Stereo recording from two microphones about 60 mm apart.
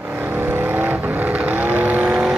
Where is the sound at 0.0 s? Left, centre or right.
Right.